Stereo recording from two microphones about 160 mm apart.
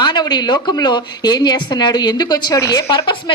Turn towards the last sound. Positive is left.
turn(degrees=30)  # may be behind; listen again after turning